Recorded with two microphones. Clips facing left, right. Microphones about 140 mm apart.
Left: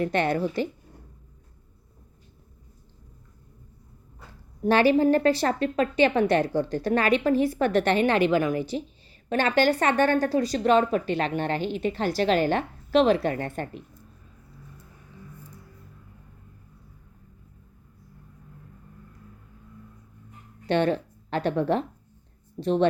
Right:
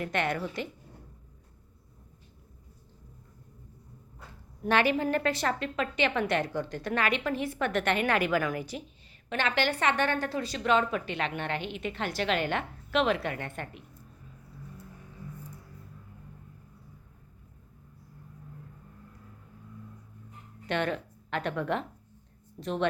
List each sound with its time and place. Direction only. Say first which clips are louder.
0.0 s speech: left 6 dB; 35° left (ahead or behind)
4.6 s speech: left 7 dB; 35° left (ahead or behind)
9.3 s speech: left 7 dB; 40° left (ahead or behind)
20.7 s speech: left 7 dB; 30° left (ahead or behind)